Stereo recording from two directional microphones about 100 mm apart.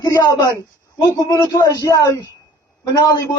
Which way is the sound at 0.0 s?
30° left (ahead or behind).